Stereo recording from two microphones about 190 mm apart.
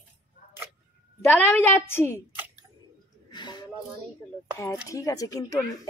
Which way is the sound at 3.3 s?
25° left (ahead or behind).